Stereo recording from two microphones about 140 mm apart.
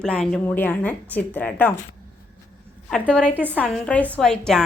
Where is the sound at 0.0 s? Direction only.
5° left (ahead or behind).